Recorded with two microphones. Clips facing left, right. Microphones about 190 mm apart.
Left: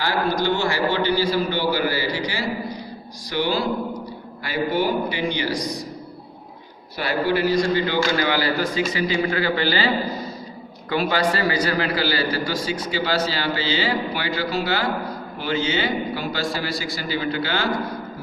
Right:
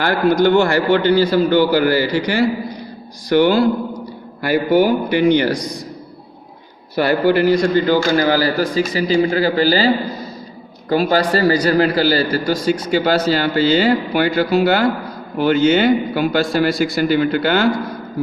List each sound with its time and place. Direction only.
0.0 s a man's voice: 55° right (ahead or behind)
6.9 s a man's voice: 55° right (ahead or behind)